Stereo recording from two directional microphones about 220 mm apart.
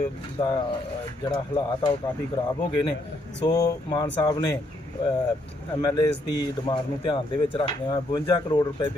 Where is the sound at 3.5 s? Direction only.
15° left (ahead or behind).